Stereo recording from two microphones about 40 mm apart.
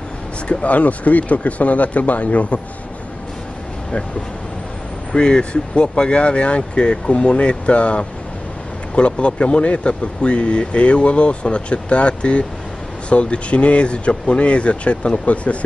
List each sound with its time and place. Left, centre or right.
0.5 s speech: left
5.1 s speech: left